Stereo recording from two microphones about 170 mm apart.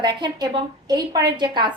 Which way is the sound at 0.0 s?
25° right (ahead or behind).